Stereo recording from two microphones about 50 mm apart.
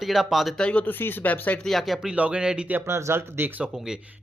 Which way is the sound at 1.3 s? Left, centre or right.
Left.